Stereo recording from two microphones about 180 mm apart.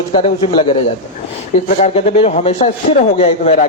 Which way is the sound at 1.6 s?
35° left (ahead or behind).